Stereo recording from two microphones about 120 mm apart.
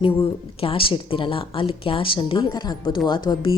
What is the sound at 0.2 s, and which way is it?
A woman's voice, 50° left (ahead or behind).